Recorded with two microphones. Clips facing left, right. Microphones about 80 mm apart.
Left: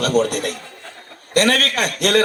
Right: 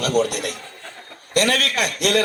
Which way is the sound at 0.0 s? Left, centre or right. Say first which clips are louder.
Left 2 dB; left.